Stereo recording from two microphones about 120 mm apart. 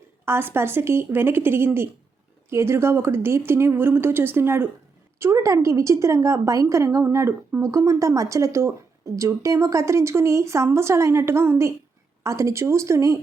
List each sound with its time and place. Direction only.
0.3 s a woman's voice: 20° right (ahead or behind)